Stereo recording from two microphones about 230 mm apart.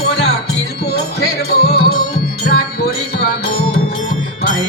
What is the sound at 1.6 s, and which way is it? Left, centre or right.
Music, left.